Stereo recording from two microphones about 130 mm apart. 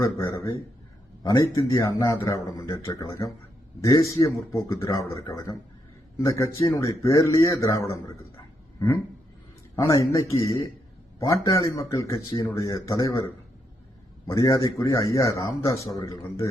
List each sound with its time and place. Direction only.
0.3 s a man's voice: 35° left (ahead or behind)
9.7 s speech: 25° left (ahead or behind)